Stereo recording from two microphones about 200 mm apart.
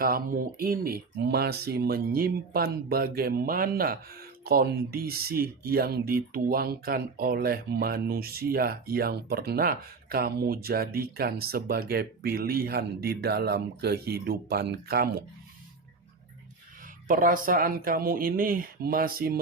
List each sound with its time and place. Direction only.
0.0 s speech: 45° right (ahead or behind)
16.8 s speech: 45° right (ahead or behind)